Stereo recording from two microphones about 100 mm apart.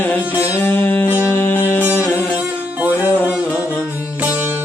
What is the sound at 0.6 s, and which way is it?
Music, 20° left (ahead or behind).